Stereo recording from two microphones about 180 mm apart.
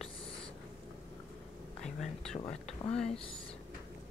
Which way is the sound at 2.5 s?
35° left (ahead or behind).